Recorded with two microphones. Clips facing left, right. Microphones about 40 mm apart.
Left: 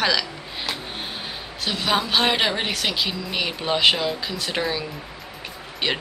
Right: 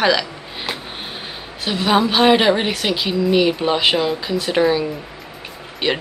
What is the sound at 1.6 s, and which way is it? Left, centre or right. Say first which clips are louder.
Speech: right 6 dB; centre.